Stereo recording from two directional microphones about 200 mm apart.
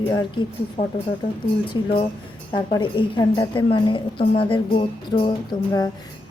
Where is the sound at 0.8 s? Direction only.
35° left (ahead or behind).